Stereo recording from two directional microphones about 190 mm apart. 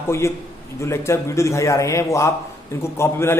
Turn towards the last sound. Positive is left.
turn(degrees=15)  # may be behind; listen again after turning